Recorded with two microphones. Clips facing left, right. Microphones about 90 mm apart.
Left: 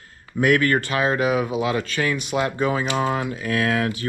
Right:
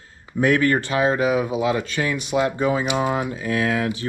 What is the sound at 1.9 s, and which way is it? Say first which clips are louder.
Speech: right 1 dB; 60° left (ahead or behind).